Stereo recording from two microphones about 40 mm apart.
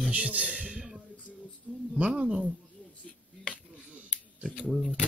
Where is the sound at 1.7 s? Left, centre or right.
Right.